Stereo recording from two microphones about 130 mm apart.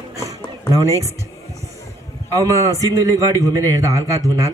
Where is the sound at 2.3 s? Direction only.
25° right (ahead or behind).